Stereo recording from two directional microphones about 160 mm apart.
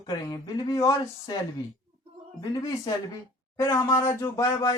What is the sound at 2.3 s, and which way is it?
Speech, 20° left (ahead or behind).